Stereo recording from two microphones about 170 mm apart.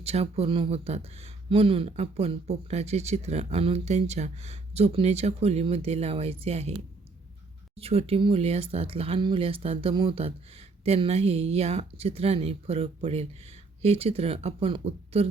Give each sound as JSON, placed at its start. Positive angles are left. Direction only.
{"t": 0.0, "sound": "speech", "side_deg": -40}
{"t": 7.8, "sound": "speech", "side_deg": -35}